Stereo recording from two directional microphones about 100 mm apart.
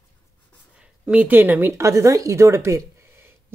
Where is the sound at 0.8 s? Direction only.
15° right (ahead or behind).